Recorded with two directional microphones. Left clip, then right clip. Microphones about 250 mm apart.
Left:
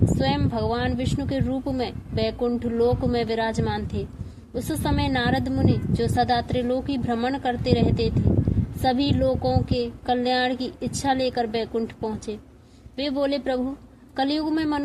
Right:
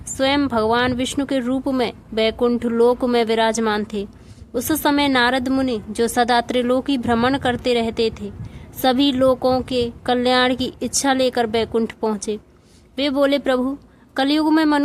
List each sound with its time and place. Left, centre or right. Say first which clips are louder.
0.2 s speech: right 12 dB; right